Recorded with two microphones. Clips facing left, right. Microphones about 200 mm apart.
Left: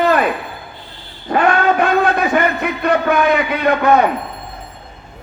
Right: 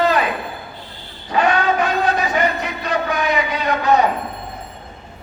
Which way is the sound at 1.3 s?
55° left (ahead or behind).